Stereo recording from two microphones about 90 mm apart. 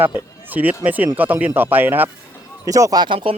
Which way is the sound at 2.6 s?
40° right (ahead or behind).